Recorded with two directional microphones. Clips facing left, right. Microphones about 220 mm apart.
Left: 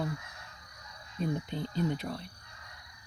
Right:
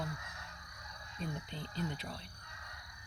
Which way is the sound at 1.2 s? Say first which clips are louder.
Left 9 dB; 55° left (ahead or behind).